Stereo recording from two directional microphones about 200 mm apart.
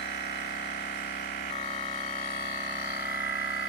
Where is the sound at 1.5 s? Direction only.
30° left (ahead or behind).